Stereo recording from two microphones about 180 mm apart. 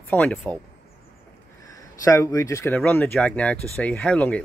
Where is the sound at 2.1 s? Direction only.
15° left (ahead or behind).